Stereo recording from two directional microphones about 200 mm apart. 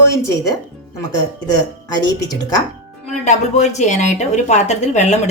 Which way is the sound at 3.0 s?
35° left (ahead or behind).